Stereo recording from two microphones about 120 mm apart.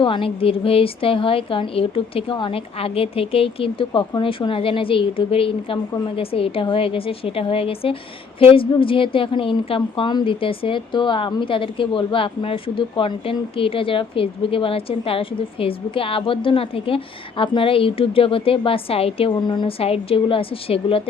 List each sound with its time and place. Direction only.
0.0 s a woman's voice: 45° left (ahead or behind)
19.4 s speech: 40° left (ahead or behind)
19.8 s a woman's voice: 50° left (ahead or behind)